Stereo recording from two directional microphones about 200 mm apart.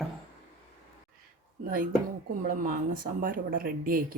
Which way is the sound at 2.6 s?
45° right (ahead or behind).